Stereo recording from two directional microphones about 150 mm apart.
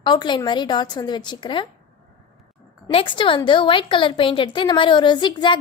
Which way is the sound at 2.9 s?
35° left (ahead or behind).